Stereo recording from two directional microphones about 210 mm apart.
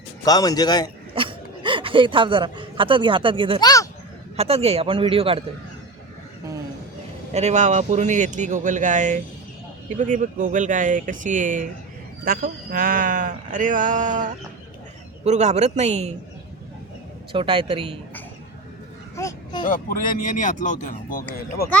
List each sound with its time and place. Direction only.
0.3 s speech: 15° left (ahead or behind)
1.1 s speech: 25° right (ahead or behind)
3.6 s a sound: 15° left (ahead or behind)
4.4 s a man's voice: 30° right (ahead or behind)
7.3 s speech: 35° right (ahead or behind)
17.3 s a man's voice: 25° right (ahead or behind)
19.1 s speech: 15° left (ahead or behind)
19.6 s speech: 40° left (ahead or behind)